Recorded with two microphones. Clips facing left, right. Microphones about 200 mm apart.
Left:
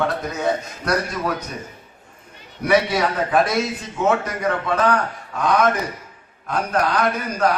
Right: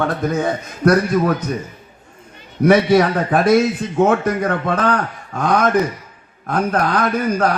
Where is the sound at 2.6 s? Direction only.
50° right (ahead or behind).